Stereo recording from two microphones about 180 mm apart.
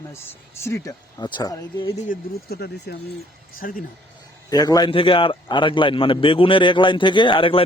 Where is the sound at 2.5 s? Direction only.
65° left (ahead or behind).